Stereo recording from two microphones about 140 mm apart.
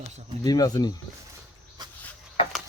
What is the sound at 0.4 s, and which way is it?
Speech, 25° left (ahead or behind).